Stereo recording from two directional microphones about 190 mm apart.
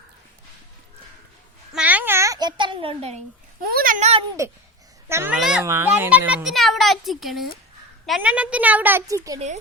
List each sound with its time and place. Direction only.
1.7 s a sound: 5° right (ahead or behind); by 3.2 s 30° right (ahead or behind)
3.6 s a child's voice: 50° right (ahead or behind)
4.4 s a child's voice: 15° right (ahead or behind)